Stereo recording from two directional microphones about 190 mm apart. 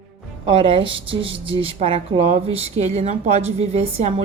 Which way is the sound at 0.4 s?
25° right (ahead or behind).